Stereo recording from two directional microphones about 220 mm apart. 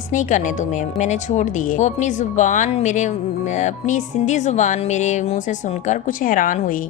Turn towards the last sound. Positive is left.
turn(degrees=40)  # may be behind; listen again after turning